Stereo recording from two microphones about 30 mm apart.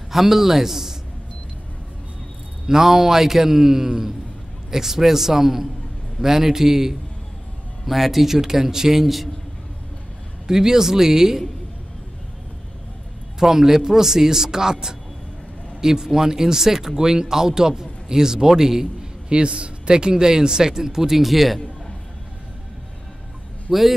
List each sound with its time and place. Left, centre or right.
0.1 s speech: centre
2.6 s speech: centre
10.4 s speech: centre
13.4 s speech: centre
19.2 s speech: right; by 21.2 s centre
21.2 s speech: centre
23.7 s a man's voice: centre